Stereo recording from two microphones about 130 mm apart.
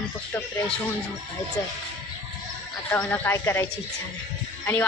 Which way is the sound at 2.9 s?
10° left (ahead or behind).